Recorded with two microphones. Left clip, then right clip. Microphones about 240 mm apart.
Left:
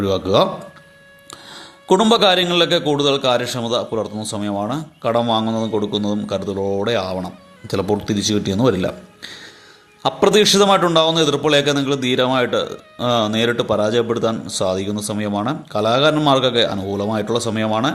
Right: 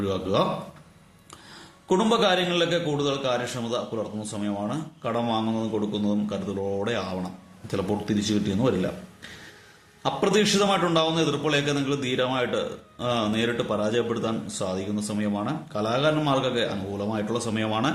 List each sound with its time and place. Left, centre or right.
0.0 s a man's voice: left
1.9 s a man's voice: left